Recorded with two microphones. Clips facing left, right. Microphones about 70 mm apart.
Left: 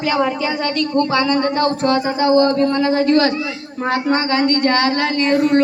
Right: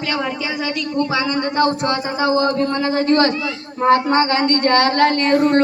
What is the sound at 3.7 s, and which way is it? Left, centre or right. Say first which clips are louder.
Speech: right 4 dB; right.